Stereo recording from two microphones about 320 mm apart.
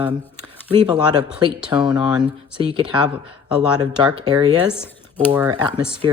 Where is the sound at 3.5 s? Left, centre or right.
Centre.